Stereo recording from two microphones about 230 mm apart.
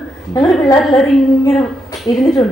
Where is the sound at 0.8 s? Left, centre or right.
Centre.